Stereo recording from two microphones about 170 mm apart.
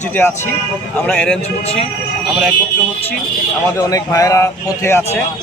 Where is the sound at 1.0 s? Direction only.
5° left (ahead or behind).